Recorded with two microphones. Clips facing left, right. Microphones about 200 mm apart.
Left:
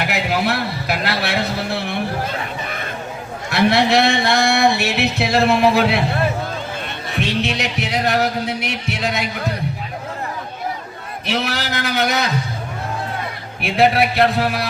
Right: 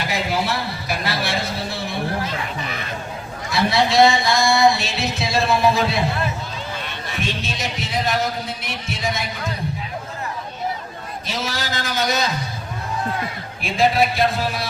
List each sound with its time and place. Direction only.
0.0 s a sound: 65° left (ahead or behind)
3.5 s speech: 65° left (ahead or behind)
7.1 s speech: 65° left (ahead or behind)
11.3 s speech: 65° left (ahead or behind)
13.6 s speech: 65° left (ahead or behind)